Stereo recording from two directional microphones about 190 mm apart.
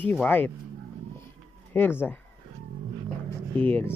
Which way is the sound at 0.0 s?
10° left (ahead or behind).